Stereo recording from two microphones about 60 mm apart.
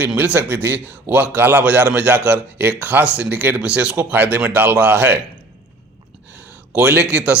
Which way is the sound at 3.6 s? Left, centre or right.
Centre.